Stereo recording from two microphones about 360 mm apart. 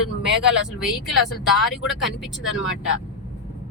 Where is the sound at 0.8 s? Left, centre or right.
Centre.